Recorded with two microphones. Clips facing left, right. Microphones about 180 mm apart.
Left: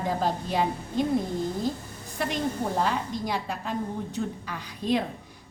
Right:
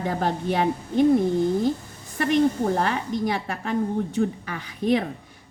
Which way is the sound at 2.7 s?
70° right (ahead or behind).